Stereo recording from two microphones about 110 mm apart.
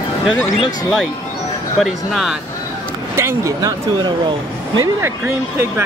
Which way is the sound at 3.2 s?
25° right (ahead or behind).